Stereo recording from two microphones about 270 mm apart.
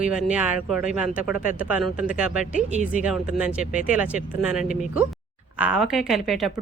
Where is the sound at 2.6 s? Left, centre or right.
Right.